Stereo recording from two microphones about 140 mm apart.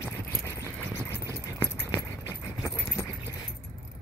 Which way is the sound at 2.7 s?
20° left (ahead or behind).